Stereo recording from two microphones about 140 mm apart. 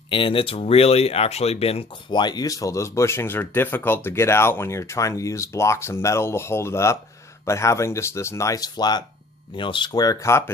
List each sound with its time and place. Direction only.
0.1 s speech: 40° left (ahead or behind)
2.0 s speech: 30° left (ahead or behind)